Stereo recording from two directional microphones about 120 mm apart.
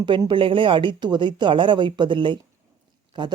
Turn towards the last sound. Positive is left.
turn(degrees=-40)  # may be behind; listen again after turning